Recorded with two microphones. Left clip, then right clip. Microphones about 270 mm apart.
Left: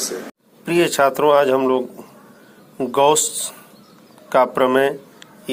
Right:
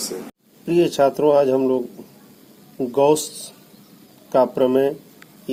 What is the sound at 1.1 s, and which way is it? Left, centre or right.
Speech, left.